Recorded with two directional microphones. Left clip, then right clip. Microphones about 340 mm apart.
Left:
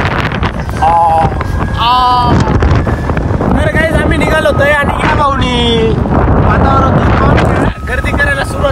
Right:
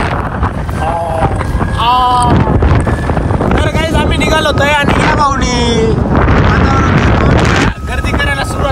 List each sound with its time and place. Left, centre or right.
1.8 s vehicle: centre
3.6 s a sound: centre
6.3 s vehicle: centre